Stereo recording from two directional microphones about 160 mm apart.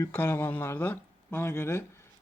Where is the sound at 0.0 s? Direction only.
15° left (ahead or behind).